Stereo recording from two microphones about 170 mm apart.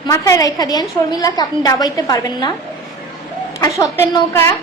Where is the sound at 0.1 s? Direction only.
20° left (ahead or behind).